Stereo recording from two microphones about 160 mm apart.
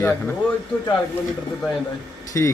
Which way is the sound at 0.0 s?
10° left (ahead or behind).